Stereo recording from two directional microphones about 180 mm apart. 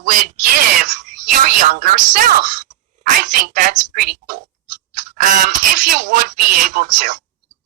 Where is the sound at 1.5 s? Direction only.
50° right (ahead or behind).